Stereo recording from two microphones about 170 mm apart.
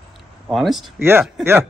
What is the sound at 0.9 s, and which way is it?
Speech, 15° right (ahead or behind).